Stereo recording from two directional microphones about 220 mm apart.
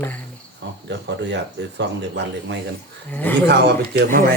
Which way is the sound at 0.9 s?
50° right (ahead or behind).